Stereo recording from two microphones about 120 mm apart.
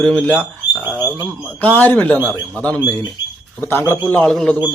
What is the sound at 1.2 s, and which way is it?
A man's voice, 15° left (ahead or behind).